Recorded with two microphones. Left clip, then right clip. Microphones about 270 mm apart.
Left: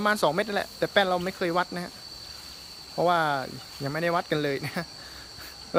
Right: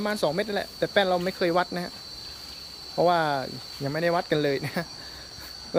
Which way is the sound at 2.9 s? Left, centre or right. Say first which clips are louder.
Right 1 dB; centre.